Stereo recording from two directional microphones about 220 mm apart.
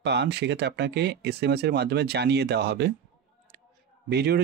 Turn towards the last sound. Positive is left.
turn(degrees=-45)  # may be behind; listen again after turning